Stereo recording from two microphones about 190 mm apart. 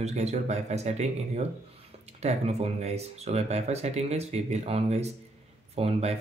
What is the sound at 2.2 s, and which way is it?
Speech, 35° right (ahead or behind).